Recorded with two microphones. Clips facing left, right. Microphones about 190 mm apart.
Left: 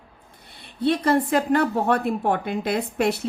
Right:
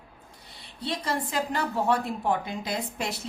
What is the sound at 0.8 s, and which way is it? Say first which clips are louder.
Speech: left 10 dB; 55° left (ahead or behind).